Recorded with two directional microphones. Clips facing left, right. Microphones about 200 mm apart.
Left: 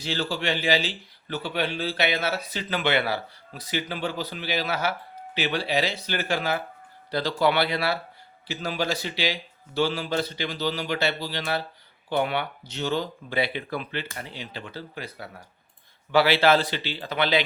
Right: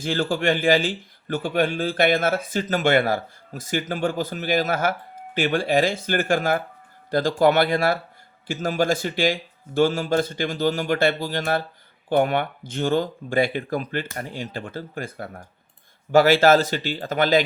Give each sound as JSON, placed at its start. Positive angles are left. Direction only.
{"t": 0.0, "sound": "speech", "side_deg": -50}